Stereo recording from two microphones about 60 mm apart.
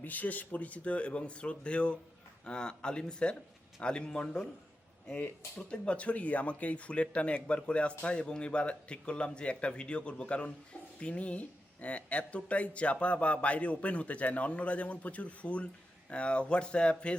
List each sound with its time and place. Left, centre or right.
0.0 s speech: left